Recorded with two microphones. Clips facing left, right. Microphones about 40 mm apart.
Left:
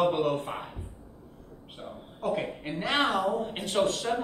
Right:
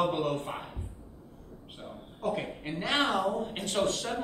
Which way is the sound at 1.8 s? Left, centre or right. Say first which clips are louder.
Left 1 dB; centre.